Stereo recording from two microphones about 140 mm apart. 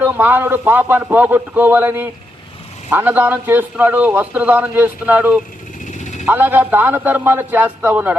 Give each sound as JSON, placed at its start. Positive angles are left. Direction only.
{"t": 0.0, "sound": "a man's voice", "side_deg": -15}
{"t": 6.0, "sound": "a sound", "side_deg": 60}
{"t": 6.2, "sound": "a man's voice", "side_deg": -15}